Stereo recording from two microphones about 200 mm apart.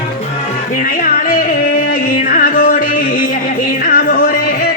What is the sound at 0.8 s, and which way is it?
Music, 45° left (ahead or behind).